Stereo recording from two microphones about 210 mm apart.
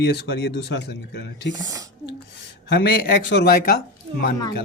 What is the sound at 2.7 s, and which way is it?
Speech, 50° left (ahead or behind).